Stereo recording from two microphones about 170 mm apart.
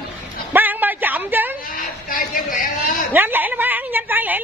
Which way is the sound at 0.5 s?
10° right (ahead or behind).